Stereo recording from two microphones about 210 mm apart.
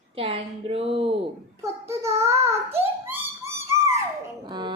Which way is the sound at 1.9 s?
15° right (ahead or behind).